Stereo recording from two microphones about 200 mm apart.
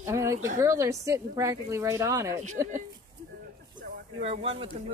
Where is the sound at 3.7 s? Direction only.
30° right (ahead or behind).